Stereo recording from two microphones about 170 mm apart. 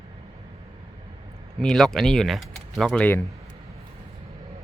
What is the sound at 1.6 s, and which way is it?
Speech, 5° left (ahead or behind).